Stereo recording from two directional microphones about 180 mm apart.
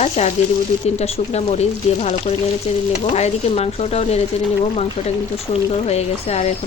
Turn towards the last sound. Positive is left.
turn(degrees=35)  # may be behind; listen again after turning